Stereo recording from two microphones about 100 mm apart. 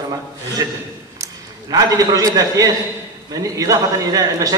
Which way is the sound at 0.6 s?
35° right (ahead or behind).